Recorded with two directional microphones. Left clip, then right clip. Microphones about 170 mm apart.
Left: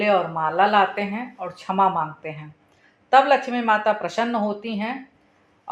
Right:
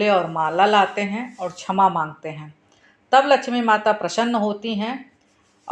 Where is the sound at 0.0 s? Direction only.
40° right (ahead or behind).